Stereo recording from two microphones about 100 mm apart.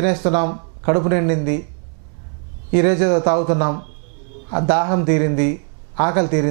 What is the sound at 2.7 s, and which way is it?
Speech, 15° right (ahead or behind).